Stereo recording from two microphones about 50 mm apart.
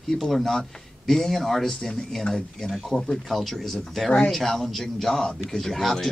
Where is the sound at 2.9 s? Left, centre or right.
Centre.